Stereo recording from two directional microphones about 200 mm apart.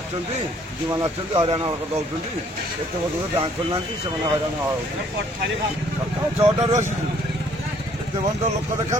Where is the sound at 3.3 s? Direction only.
25° right (ahead or behind).